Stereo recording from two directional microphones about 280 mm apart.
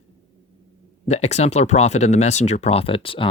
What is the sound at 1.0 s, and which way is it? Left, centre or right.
Speech, left.